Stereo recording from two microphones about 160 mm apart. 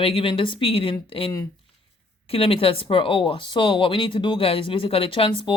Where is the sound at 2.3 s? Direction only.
35° left (ahead or behind).